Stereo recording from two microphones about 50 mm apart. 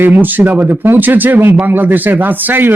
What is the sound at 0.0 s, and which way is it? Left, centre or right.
Speech, right.